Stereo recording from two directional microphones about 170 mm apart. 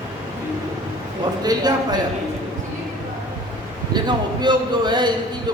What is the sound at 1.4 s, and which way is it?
Speech, 25° right (ahead or behind).